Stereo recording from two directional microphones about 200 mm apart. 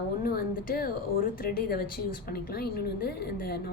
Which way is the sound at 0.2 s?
50° left (ahead or behind).